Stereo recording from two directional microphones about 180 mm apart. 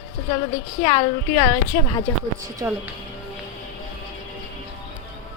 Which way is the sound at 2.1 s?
15° left (ahead or behind).